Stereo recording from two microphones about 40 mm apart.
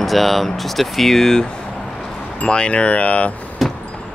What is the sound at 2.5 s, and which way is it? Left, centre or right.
Speech, left.